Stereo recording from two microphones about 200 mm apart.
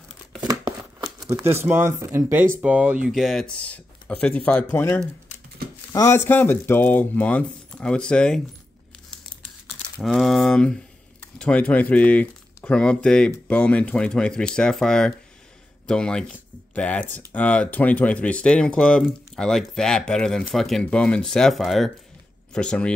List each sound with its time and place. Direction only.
0.5 s a sound: 20° right (ahead or behind)
1.3 s speech: 10° right (ahead or behind); by 8.4 s 5° left (ahead or behind)
9.9 s speech: centre (ahead or behind)